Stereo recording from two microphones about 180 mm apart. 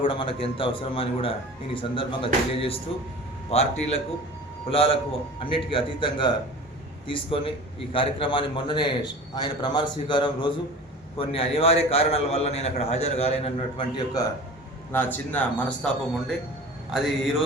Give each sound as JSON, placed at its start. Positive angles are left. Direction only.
{"t": 0.0, "sound": "a man's voice", "side_deg": 30}
{"t": 14.9, "sound": "speech", "side_deg": 10}
{"t": 16.9, "sound": "speech", "side_deg": 0}